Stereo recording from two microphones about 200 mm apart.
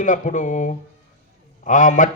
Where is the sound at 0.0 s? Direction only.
40° left (ahead or behind).